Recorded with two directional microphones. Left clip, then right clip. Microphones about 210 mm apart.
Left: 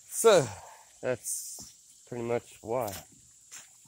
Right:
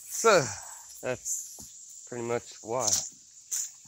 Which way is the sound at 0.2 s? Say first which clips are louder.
Left 1 dB; 10° left (ahead or behind).